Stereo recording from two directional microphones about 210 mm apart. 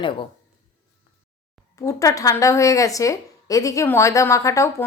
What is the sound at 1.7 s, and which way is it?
A woman's voice, 15° left (ahead or behind).